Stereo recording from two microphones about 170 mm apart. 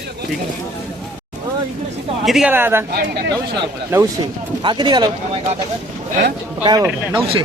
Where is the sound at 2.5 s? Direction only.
15° right (ahead or behind).